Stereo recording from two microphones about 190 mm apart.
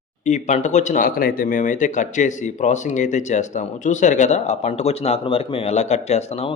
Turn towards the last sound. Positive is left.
turn(degrees=35)  # may be behind; listen again after turning